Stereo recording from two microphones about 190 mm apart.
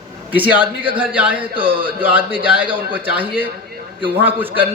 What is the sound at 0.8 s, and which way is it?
Speech, 5° right (ahead or behind).